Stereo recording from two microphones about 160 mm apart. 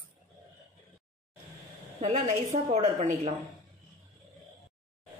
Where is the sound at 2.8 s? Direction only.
50° right (ahead or behind).